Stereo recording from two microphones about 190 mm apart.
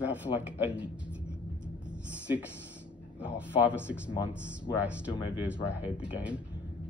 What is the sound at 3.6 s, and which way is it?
Speech, 5° right (ahead or behind).